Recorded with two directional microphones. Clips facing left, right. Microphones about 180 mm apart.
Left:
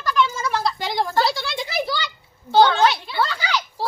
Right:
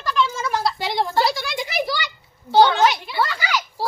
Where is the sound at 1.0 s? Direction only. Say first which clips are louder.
Even; 15° right (ahead or behind).